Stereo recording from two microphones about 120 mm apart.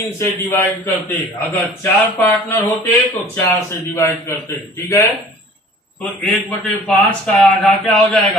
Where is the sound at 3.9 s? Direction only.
25° left (ahead or behind).